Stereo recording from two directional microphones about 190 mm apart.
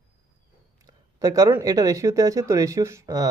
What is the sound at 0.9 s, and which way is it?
Speech, 15° right (ahead or behind).